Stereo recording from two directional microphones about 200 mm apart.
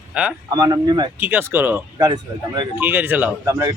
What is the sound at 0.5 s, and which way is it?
Speech, 20° right (ahead or behind).